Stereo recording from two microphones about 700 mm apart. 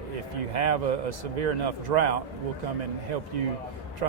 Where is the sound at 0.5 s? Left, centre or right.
Right.